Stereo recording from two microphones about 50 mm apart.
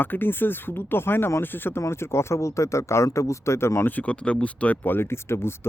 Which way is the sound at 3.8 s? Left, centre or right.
Left.